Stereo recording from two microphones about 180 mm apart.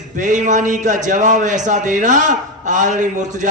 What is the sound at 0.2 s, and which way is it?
A man's voice, 45° right (ahead or behind).